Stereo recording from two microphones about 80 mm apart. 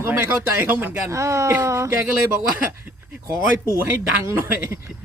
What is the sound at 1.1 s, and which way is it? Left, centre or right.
Speech, right.